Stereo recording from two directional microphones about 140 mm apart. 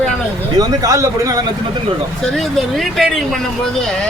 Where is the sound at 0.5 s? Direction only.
25° right (ahead or behind).